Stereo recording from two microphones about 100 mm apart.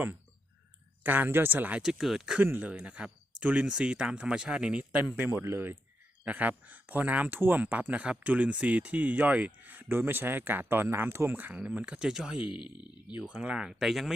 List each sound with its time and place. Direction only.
1.0 s speech: 20° right (ahead or behind)
1.8 s speech: centre (ahead or behind)
2.4 s speech: 15° right (ahead or behind)
12.5 s speech: 50° left (ahead or behind)
13.2 s speech: 10° right (ahead or behind)